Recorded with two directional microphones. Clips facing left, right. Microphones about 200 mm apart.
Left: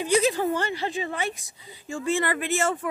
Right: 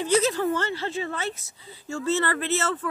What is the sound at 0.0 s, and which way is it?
Speech, 15° left (ahead or behind).